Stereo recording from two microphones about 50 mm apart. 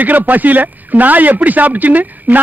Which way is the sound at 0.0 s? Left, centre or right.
Right.